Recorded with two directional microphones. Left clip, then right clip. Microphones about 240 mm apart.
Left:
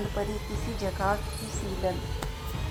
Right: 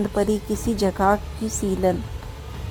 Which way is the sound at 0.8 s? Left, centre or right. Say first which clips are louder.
Right 9 dB; right.